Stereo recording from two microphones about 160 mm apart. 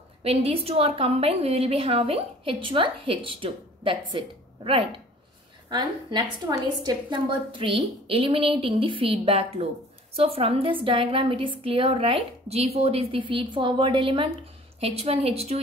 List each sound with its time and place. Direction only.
0.2 s a woman's voice: 40° right (ahead or behind)